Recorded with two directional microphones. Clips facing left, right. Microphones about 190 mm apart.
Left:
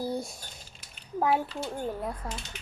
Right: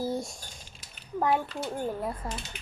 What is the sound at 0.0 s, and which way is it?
Typing, centre (ahead or behind).